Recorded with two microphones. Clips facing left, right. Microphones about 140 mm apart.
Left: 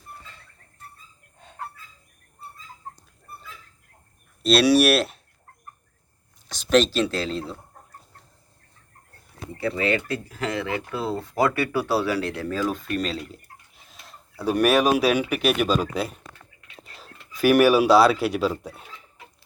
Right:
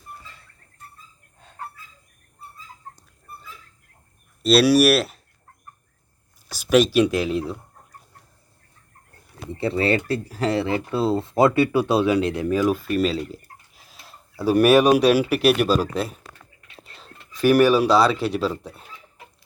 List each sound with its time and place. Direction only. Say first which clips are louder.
1.4 s fowl: left 2 dB; centre (ahead or behind)
4.4 s speech: right 2 dB; centre (ahead or behind)
6.5 s speech: right 2 dB; 10° right (ahead or behind)
9.6 s speech: right 3 dB; 30° right (ahead or behind); by 18.9 s centre (ahead or behind)